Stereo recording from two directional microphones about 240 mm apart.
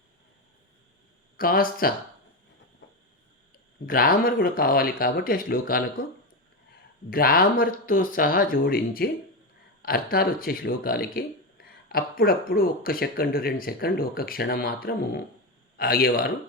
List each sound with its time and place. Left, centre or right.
1.4 s speech: left
3.8 s speech: left
7.1 s speech: left